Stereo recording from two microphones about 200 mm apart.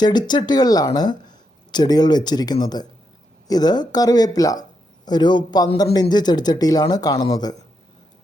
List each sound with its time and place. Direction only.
0.0 s speech: 20° left (ahead or behind)